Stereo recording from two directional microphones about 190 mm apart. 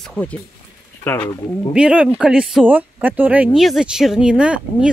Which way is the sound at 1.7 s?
5° right (ahead or behind).